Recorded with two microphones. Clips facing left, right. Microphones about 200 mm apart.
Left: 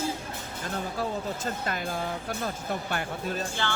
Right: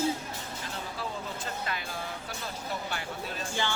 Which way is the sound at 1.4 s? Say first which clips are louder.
Left 5 dB; 45° left (ahead or behind).